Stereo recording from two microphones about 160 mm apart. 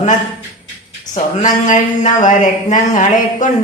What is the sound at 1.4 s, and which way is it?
A woman's voice, 50° left (ahead or behind).